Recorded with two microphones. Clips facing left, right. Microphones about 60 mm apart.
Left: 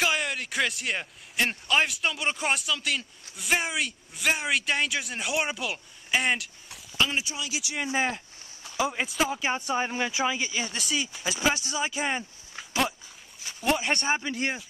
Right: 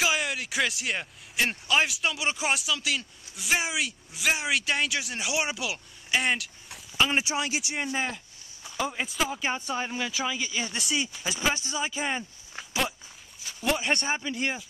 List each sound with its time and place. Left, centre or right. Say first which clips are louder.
0.0 s speech: even; centre
7.4 s speech: right 3 dB; right
7.9 s speech: left 5 dB; centre
8.7 s speech: left 2 dB; centre
9.8 s speech: left 3 dB; centre
10.5 s speech: even; centre
12.5 s dog: left 2 dB; centre
13.6 s speech: left 1 dB; centre
14.2 s speech: even; left